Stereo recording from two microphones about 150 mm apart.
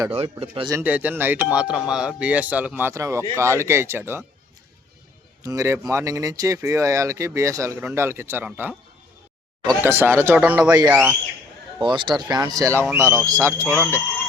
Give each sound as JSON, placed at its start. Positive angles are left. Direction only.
{"t": 0.1, "sound": "speech", "side_deg": -40}
{"t": 0.7, "sound": "speech", "side_deg": -15}
{"t": 5.4, "sound": "speech", "side_deg": -20}
{"t": 10.6, "sound": "speech", "side_deg": -25}
{"t": 13.7, "sound": "speech", "side_deg": 15}